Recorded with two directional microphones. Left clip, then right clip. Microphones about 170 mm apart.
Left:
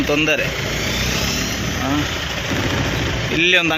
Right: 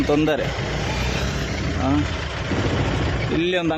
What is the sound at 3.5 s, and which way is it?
Speech, 15° right (ahead or behind).